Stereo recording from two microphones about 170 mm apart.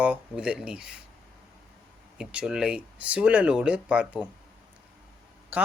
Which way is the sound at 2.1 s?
5° right (ahead or behind).